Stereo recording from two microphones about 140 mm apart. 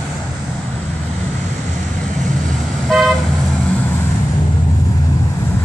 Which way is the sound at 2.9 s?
Centre (ahead or behind).